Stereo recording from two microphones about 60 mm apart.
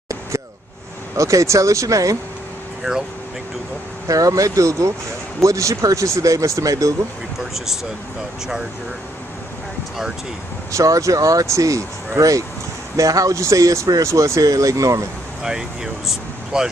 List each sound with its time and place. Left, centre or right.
1.1 s speech: right
4.1 s speech: right
7.3 s speech: centre
10.8 s speech: right
14.0 s speech: right
15.4 s speech: centre